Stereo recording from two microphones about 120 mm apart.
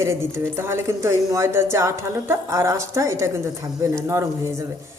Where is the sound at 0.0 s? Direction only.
25° right (ahead or behind).